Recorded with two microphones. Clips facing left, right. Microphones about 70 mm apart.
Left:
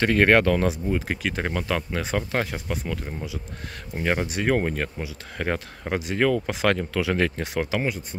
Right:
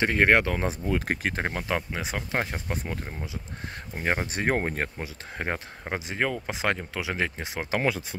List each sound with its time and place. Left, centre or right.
0.0 s speech: centre
0.8 s speech: right; by 2.4 s centre
2.4 s speech: right
4.0 s speech: right
5.4 s speech: right